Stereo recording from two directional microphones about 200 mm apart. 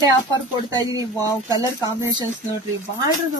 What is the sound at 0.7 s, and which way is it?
Speech, 20° right (ahead or behind).